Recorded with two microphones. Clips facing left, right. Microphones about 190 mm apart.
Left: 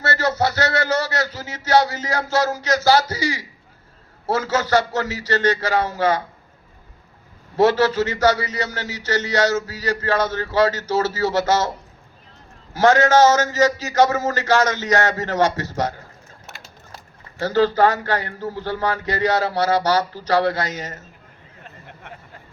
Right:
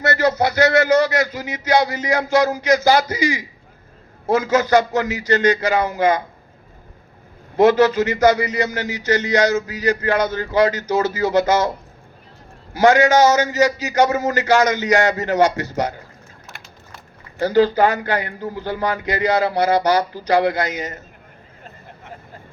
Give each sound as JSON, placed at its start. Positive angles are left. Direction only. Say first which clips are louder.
{"t": 0.2, "sound": "a man's voice", "louder": "right 4 dB", "side_deg": -15}
{"t": 7.5, "sound": "a man's voice", "louder": "right 3 dB", "side_deg": -15}
{"t": 12.7, "sound": "a man's voice", "louder": "right 1 dB", "side_deg": -15}
{"t": 16.5, "sound": "a sound", "louder": "left 1 dB", "side_deg": 70}
{"t": 17.4, "sound": "a man's voice", "louder": "right 2 dB", "side_deg": -15}